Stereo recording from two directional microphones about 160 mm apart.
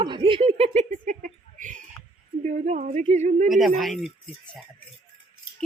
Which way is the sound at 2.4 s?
45° right (ahead or behind).